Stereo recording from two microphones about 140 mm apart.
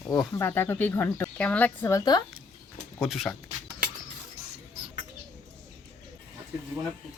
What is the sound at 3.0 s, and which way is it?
Speech, centre (ahead or behind).